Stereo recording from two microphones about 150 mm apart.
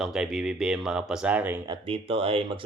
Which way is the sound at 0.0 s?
5° right (ahead or behind).